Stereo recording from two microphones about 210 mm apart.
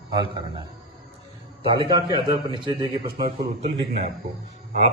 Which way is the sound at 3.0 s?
45° right (ahead or behind).